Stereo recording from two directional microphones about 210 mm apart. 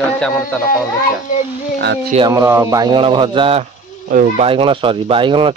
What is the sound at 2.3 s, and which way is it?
Speech, 15° right (ahead or behind).